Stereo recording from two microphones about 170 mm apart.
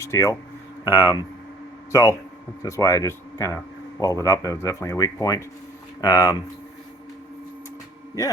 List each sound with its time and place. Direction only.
0.0 s speech: 20° left (ahead or behind)